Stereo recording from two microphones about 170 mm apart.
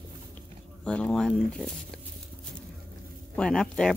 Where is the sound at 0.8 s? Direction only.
5° left (ahead or behind).